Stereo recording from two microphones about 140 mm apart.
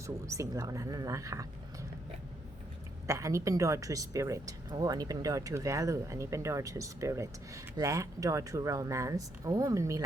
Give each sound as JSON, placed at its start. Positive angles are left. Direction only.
{"t": 0.3, "sound": "speech", "side_deg": -25}
{"t": 3.1, "sound": "speech", "side_deg": -20}